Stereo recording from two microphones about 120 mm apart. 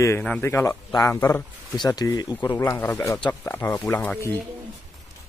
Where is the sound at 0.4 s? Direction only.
20° left (ahead or behind).